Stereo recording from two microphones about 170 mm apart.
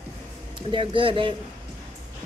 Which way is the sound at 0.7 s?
30° right (ahead or behind).